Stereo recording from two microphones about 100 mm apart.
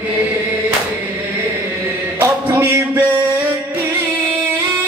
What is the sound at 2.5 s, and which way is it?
Music, 20° right (ahead or behind).